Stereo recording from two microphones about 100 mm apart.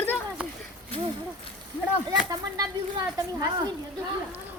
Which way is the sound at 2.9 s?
45° right (ahead or behind).